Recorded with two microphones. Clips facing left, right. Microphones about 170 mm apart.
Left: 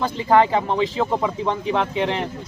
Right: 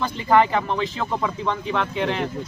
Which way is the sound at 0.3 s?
25° left (ahead or behind).